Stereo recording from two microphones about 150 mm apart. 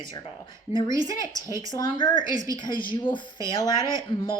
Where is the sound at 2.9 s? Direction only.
35° left (ahead or behind).